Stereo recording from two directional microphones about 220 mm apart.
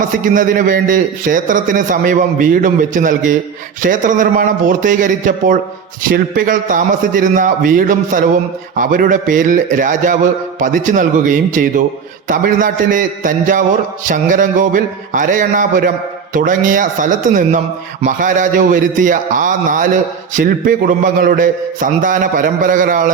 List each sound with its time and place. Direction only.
0.0 s a man's voice: 35° right (ahead or behind)